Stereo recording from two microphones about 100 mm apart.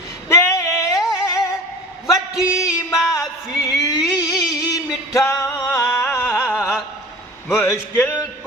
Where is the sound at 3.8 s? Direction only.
35° left (ahead or behind).